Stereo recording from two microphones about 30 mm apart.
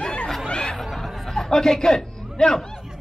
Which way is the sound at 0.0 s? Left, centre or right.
Left.